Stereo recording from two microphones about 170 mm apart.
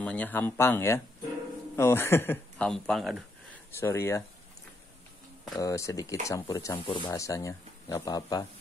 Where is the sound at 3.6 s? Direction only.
15° left (ahead or behind).